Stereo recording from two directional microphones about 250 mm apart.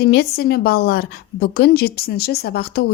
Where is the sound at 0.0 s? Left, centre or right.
Left.